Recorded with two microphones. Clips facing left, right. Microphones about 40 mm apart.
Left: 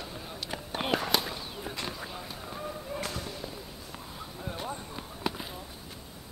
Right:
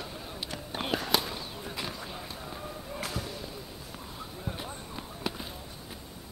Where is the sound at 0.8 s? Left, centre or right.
Centre.